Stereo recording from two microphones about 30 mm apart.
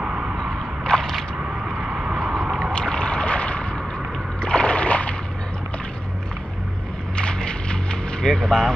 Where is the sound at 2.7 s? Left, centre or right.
Left.